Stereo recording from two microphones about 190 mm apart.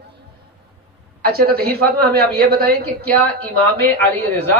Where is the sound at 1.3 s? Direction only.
55° right (ahead or behind).